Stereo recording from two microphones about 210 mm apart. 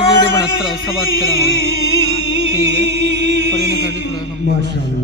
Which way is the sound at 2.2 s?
55° right (ahead or behind).